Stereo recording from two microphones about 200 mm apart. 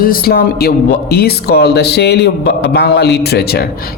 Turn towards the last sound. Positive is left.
turn(degrees=50)  # may be behind; listen again after turning